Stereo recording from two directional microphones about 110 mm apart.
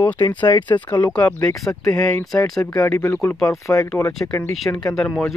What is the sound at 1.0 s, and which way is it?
Speech, 10° left (ahead or behind).